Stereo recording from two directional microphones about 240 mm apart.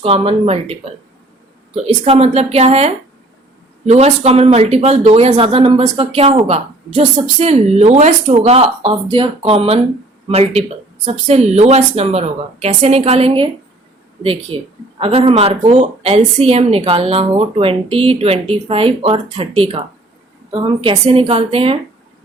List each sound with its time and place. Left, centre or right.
0.0 s speech: right
2.0 s speech: right